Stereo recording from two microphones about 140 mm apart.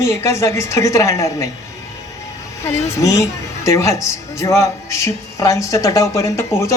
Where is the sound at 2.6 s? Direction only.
25° left (ahead or behind).